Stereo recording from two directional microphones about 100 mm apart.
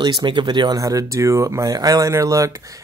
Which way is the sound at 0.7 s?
35° right (ahead or behind).